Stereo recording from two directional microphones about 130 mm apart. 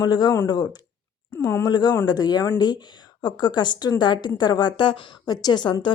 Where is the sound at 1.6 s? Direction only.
30° left (ahead or behind).